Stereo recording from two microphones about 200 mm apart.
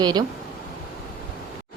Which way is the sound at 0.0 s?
20° right (ahead or behind).